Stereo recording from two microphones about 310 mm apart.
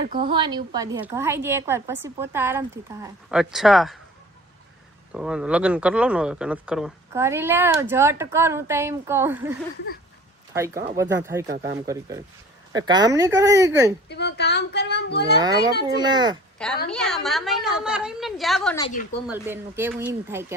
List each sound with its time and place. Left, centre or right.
0.0 s a woman's voice: right; by 3.9 s centre
5.1 s speech: centre
11.4 s a woman's voice: right
11.9 s speech: centre
14.1 s speech: left
16.0 s speech: centre
16.9 s a woman's voice: centre